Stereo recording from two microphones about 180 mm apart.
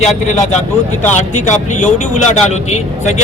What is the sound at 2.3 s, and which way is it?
Speech, 40° left (ahead or behind).